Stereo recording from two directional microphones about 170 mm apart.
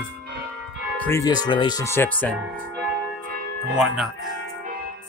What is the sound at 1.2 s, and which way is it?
Speech, 25° left (ahead or behind).